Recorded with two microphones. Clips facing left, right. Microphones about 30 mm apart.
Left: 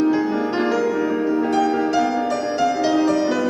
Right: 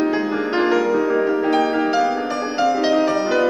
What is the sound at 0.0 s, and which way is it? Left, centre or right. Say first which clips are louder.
Music: left 1 dB; right.